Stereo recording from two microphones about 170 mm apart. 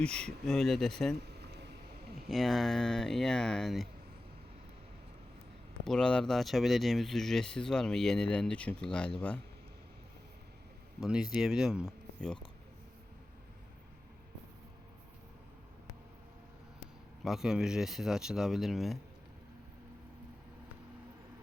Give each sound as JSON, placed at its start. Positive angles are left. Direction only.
{"t": 0.0, "sound": "speech", "side_deg": 5}
{"t": 1.2, "sound": "a sound", "side_deg": -75}
{"t": 2.3, "sound": "speech", "side_deg": 0}
{"t": 5.8, "sound": "speech", "side_deg": 5}
{"t": 11.0, "sound": "speech", "side_deg": -5}
{"t": 17.2, "sound": "speech", "side_deg": -5}